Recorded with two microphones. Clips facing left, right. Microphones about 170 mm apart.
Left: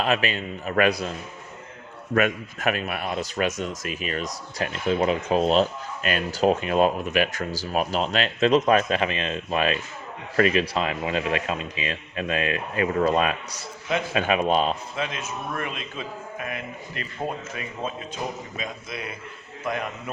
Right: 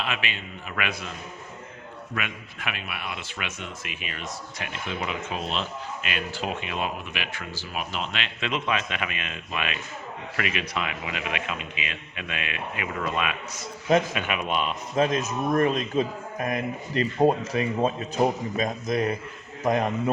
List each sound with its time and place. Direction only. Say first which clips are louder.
0.0 s a man's voice: left 8 dB; 40° left (ahead or behind)
2.1 s a man's voice: left 12 dB; 45° left (ahead or behind)
14.9 s a man's voice: right 7 dB; 40° right (ahead or behind)